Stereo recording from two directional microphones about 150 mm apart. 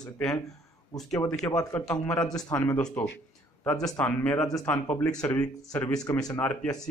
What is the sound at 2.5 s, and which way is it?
Speech, 25° left (ahead or behind).